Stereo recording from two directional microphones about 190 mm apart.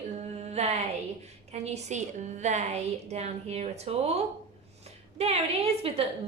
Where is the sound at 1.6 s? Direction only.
35° right (ahead or behind).